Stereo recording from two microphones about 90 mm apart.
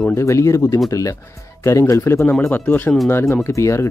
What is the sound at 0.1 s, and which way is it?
Speech, 35° left (ahead or behind).